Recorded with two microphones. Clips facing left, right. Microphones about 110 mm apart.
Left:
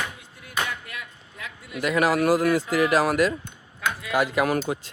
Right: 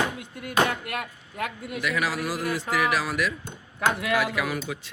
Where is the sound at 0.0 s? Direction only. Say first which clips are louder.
Right 6 dB; 60° right (ahead or behind).